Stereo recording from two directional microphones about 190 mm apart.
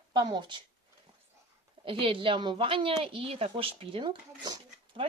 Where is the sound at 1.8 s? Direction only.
25° right (ahead or behind).